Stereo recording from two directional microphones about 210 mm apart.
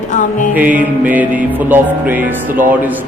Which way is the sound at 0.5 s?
5° right (ahead or behind).